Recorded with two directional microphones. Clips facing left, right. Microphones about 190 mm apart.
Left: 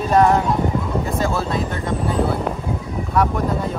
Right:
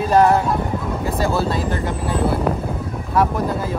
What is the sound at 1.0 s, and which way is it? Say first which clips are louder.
Speech: right 2 dB; centre (ahead or behind).